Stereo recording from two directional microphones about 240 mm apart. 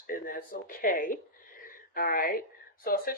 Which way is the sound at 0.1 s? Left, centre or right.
Left.